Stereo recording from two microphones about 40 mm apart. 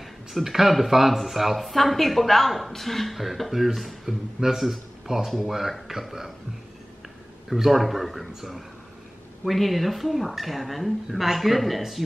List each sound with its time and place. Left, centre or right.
0.0 s speech: centre
7.4 s speech: centre